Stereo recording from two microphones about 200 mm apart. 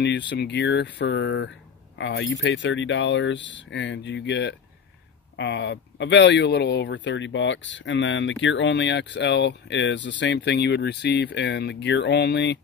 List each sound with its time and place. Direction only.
0.4 s speech: 60° left (ahead or behind)